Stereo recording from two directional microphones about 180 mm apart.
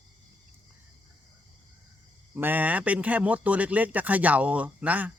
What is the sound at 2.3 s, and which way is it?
Speech, 10° right (ahead or behind).